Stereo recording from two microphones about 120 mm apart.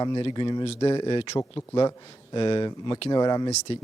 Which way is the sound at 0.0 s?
40° left (ahead or behind).